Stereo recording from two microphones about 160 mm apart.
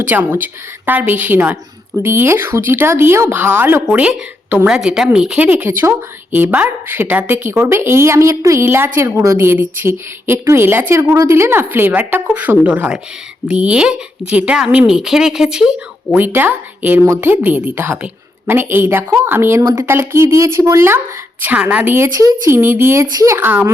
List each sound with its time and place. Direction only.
0.1 s speech: 10° right (ahead or behind)